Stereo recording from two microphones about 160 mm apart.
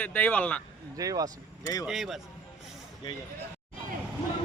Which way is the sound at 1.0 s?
20° right (ahead or behind).